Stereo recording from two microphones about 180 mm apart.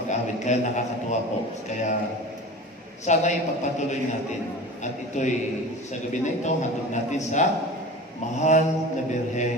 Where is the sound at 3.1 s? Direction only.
40° left (ahead or behind).